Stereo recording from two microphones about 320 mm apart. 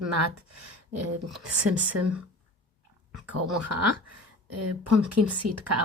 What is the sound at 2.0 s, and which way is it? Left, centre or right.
Speech, right.